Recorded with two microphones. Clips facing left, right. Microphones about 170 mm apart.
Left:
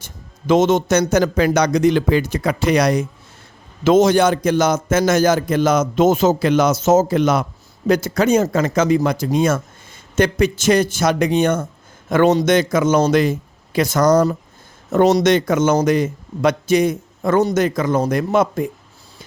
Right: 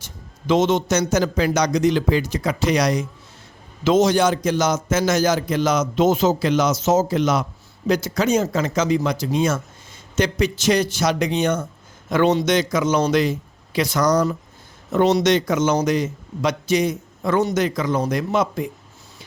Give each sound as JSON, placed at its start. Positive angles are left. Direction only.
{"t": 0.0, "sound": "a man's voice", "side_deg": 50}